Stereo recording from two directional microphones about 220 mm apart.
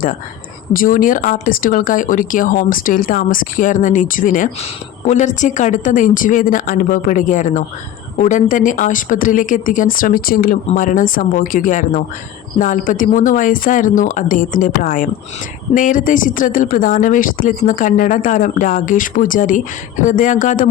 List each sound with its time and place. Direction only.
0.7 s speech: 40° left (ahead or behind)